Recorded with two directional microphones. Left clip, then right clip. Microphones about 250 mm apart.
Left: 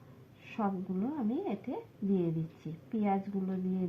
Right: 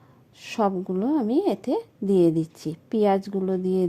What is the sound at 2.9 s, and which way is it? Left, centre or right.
Speech, right.